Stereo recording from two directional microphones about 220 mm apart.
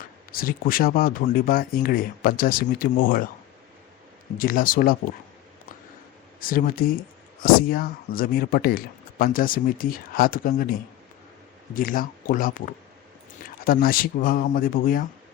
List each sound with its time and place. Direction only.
0.0 s a man's voice: 40° left (ahead or behind)
4.4 s a man's voice: 40° left (ahead or behind)
6.4 s a man's voice: 40° left (ahead or behind)